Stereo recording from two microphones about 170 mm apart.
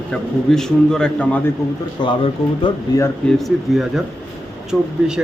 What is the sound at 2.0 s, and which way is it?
Speech, 25° left (ahead or behind).